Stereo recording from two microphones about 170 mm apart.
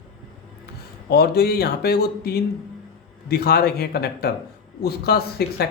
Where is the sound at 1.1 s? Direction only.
70° left (ahead or behind).